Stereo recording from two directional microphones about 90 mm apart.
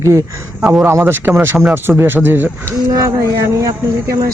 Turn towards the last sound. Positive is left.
turn(degrees=-35)  # may be behind; listen again after turning